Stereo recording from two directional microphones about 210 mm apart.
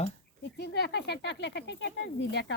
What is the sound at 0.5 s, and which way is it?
Speech, 55° left (ahead or behind).